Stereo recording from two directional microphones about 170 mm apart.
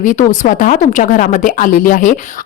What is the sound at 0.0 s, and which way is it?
Speech, 50° left (ahead or behind).